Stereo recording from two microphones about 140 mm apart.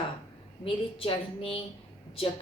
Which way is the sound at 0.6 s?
40° left (ahead or behind).